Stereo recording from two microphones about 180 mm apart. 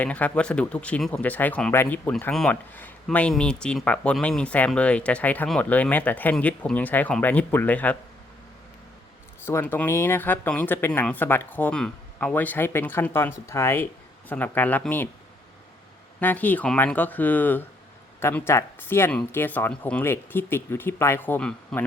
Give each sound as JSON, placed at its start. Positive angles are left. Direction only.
{"t": 0.0, "sound": "speech", "side_deg": 10}
{"t": 9.5, "sound": "speech", "side_deg": 10}
{"t": 16.2, "sound": "speech", "side_deg": 10}